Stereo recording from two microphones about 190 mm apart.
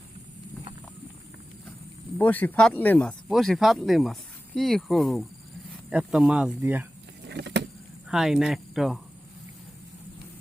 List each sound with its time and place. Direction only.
2.1 s speech: 10° left (ahead or behind); by 6.8 s 10° right (ahead or behind)
7.3 s vehicle: 65° right (ahead or behind)
8.1 s speech: centre (ahead or behind)